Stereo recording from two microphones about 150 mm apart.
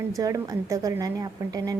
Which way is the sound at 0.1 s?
25° right (ahead or behind).